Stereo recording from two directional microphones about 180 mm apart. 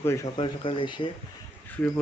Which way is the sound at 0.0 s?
15° left (ahead or behind).